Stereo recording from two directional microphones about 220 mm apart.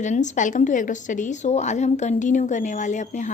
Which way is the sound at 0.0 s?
35° left (ahead or behind).